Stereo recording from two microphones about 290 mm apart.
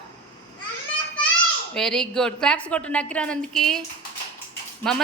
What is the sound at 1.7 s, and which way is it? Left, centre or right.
A woman's voice, centre.